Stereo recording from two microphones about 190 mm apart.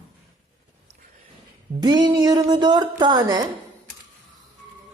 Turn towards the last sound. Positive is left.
turn(degrees=-20)  # may be behind; listen again after turning